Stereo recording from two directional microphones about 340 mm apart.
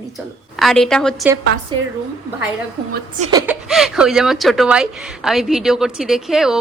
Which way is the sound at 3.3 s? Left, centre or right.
Centre.